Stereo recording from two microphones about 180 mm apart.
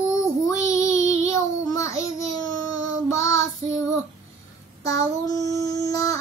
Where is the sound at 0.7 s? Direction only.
20° left (ahead or behind).